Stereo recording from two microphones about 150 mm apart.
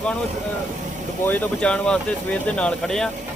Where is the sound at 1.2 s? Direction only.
10° left (ahead or behind).